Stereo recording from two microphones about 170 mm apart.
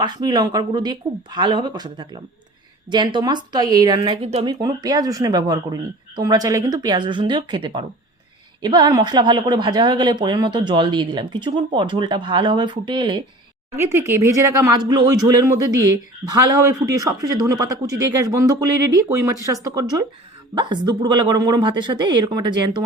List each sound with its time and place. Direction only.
0.0 s speech: 25° right (ahead or behind)
4.6 s speech: 20° right (ahead or behind)
14.1 s speech: 15° right (ahead or behind)